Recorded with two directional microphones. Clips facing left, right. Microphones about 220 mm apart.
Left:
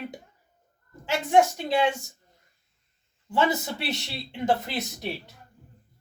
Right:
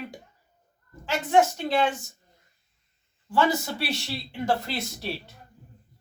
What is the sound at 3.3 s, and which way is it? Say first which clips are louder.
Speech: right 1 dB; 20° left (ahead or behind).